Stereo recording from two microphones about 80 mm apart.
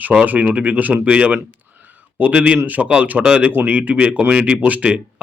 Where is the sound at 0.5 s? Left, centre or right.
Centre.